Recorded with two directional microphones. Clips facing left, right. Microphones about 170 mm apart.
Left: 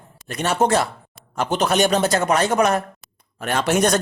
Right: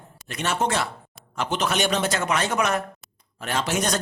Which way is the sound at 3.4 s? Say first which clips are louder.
Left 6 dB; 60° left (ahead or behind).